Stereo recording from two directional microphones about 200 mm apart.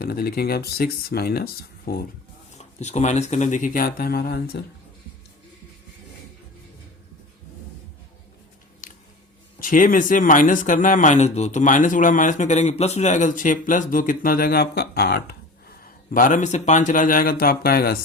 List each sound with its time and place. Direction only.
0.0 s speech: 50° left (ahead or behind)
2.5 s speech: 35° left (ahead or behind); by 4.6 s 50° left (ahead or behind)
8.8 s squish: 40° left (ahead or behind)
9.6 s speech: 45° left (ahead or behind)